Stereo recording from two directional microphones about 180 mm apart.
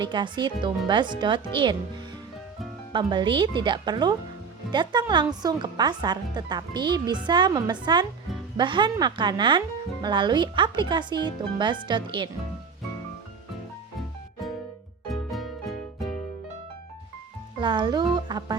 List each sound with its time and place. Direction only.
0.0 s speech: 25° right (ahead or behind)
2.9 s speech: 25° right (ahead or behind)
15.1 s music: centre (ahead or behind)
17.6 s speech: 25° right (ahead or behind)